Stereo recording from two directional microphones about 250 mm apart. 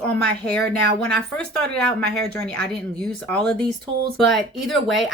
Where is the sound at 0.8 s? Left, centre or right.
Right.